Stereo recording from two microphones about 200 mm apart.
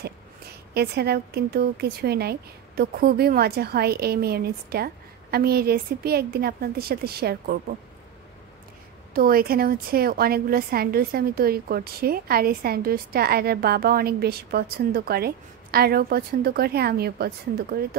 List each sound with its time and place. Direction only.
0.7 s a woman's voice: 55° right (ahead or behind)
9.1 s a woman's voice: 45° right (ahead or behind)